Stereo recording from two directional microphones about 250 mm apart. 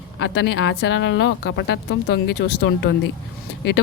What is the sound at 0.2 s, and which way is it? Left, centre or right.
Speech, left.